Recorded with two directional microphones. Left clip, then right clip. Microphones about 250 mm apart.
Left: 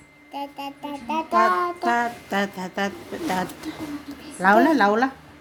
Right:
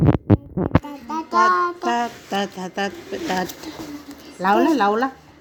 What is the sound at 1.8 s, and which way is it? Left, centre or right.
Pigeon, centre.